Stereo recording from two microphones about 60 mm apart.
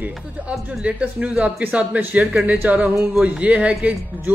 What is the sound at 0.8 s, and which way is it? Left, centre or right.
Speech, right.